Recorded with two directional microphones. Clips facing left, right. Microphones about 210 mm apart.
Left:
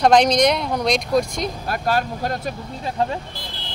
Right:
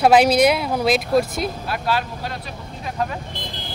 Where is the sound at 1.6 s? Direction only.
45° left (ahead or behind).